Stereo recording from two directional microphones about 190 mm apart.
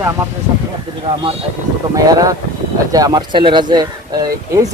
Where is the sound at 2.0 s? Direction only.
20° right (ahead or behind).